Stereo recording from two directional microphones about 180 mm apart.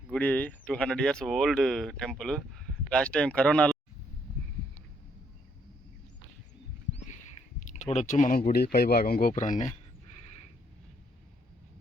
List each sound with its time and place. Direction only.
0.1 s speech: 10° left (ahead or behind)
6.9 s speech: 40° left (ahead or behind)